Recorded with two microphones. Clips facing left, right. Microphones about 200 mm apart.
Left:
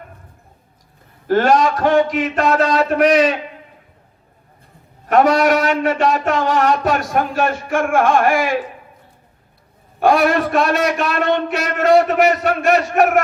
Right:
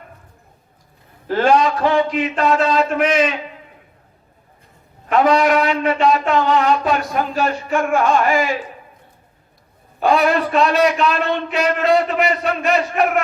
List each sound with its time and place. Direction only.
1.3 s a man's voice: 45° left (ahead or behind)
5.1 s a man's voice: 45° left (ahead or behind)
10.0 s a man's voice: 50° left (ahead or behind)